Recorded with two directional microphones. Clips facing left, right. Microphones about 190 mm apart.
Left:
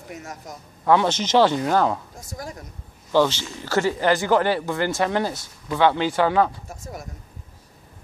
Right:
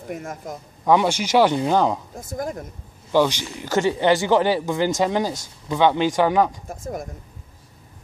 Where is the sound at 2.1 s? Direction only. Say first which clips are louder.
Right 7 dB; 55° right (ahead or behind).